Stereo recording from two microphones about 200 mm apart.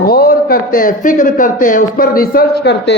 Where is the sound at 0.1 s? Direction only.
50° left (ahead or behind).